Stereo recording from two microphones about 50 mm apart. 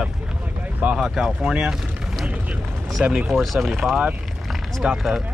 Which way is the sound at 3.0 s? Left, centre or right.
Right.